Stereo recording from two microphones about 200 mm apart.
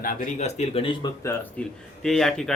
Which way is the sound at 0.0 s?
40° left (ahead or behind).